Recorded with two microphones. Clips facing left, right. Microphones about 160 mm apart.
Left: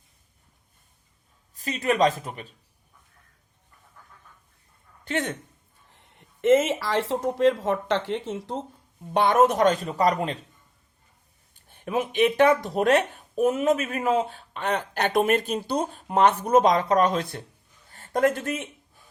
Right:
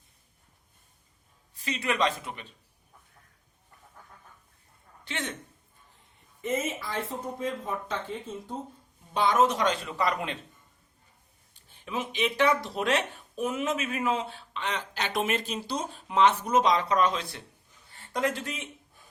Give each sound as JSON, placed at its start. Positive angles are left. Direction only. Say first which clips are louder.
{"t": 1.5, "sound": "speech", "louder": "left 6 dB", "side_deg": 45}
{"t": 5.0, "sound": "a man's voice", "louder": "left 8 dB", "side_deg": 45}
{"t": 5.9, "sound": "speech", "louder": "left 4 dB", "side_deg": 80}
{"t": 9.1, "sound": "speech", "louder": "left 5 dB", "side_deg": 60}
{"t": 11.5, "sound": "speech", "louder": "left 7 dB", "side_deg": 50}